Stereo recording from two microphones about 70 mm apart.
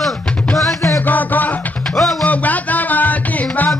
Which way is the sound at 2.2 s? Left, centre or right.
Left.